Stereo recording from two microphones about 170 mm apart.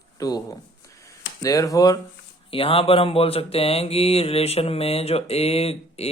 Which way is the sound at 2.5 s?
35° left (ahead or behind).